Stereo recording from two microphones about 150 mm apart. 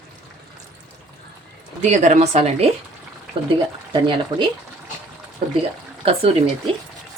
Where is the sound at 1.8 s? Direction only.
50° right (ahead or behind).